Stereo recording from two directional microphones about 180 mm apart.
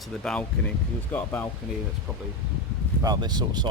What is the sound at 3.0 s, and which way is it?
Speech, 20° right (ahead or behind).